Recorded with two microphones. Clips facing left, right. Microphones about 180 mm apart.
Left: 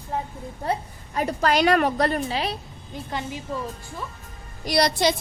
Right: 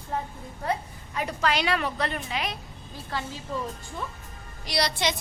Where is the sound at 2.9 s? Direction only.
20° left (ahead or behind).